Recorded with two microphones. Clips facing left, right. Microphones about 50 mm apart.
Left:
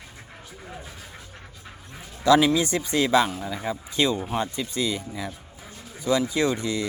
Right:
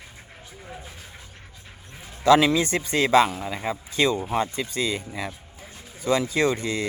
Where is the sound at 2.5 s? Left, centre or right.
Right.